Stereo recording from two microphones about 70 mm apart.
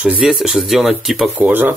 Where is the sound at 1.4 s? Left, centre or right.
Right.